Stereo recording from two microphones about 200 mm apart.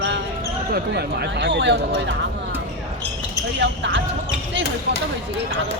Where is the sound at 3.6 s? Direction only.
60° right (ahead or behind).